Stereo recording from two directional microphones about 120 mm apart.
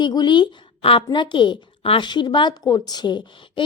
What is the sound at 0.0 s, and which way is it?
A woman's voice, 35° left (ahead or behind).